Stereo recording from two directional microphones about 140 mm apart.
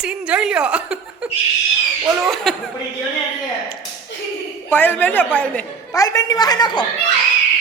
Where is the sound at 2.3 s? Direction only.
Centre (ahead or behind).